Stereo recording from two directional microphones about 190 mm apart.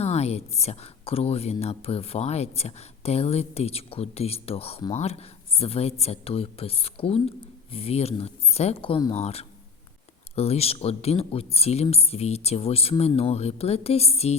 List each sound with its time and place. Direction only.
0.0 s a woman's voice: 35° left (ahead or behind)
9.1 s a woman's voice: 35° left (ahead or behind)